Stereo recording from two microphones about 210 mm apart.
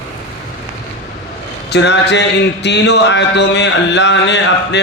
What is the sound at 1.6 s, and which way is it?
Speech, 55° left (ahead or behind).